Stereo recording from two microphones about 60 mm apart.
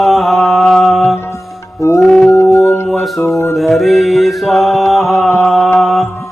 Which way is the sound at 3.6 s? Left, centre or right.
Centre.